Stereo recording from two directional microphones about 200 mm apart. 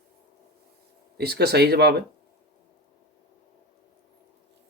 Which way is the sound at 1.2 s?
55° right (ahead or behind).